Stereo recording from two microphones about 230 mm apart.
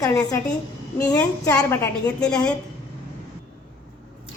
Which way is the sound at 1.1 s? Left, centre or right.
Centre.